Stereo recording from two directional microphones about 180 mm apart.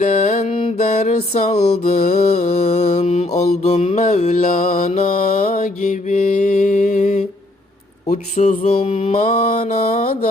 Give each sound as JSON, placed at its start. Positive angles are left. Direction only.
{"t": 0.0, "sound": "music", "side_deg": 45}
{"t": 8.1, "sound": "mantra", "side_deg": 40}